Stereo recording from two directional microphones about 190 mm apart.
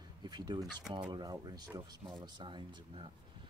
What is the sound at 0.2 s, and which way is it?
Speech, 20° right (ahead or behind).